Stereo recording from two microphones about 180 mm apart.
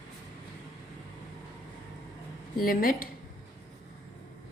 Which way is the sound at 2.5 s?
50° left (ahead or behind).